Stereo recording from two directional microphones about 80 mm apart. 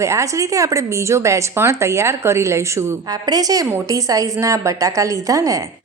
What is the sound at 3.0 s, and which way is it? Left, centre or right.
A woman's voice, right.